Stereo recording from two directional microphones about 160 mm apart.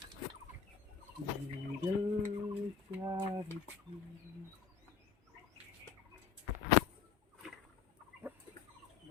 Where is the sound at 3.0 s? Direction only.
25° right (ahead or behind).